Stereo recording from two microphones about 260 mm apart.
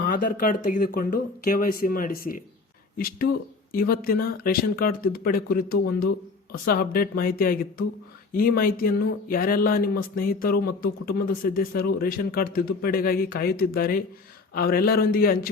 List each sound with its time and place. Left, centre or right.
0.0 s speech: left